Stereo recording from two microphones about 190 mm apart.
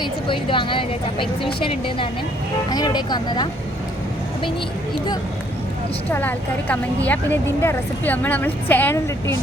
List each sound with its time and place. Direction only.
0.0 s speech: 25° left (ahead or behind)
6.1 s speech: 10° left (ahead or behind)